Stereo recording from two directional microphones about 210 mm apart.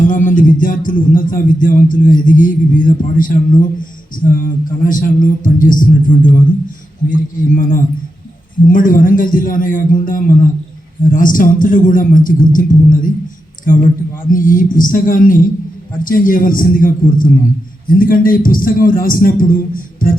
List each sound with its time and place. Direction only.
0.0 s speech: 40° left (ahead or behind)
14.3 s a man's voice: 40° left (ahead or behind)